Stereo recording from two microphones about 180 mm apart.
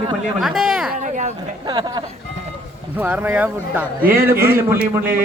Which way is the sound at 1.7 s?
25° right (ahead or behind).